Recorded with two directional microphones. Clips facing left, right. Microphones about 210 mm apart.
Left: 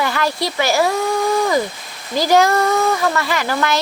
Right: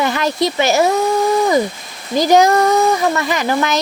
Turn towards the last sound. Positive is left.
turn(degrees=-20)  # may be behind; listen again after turning